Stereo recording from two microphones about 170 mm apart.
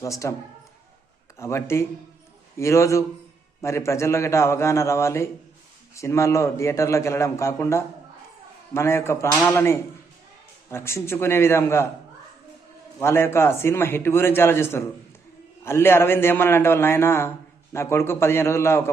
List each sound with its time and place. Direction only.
0.0 s a man's voice: 20° left (ahead or behind)
1.4 s a man's voice: 15° left (ahead or behind)
13.0 s a man's voice: 15° left (ahead or behind)